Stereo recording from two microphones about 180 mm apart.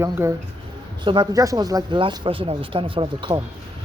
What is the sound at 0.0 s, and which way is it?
Speech, 15° right (ahead or behind).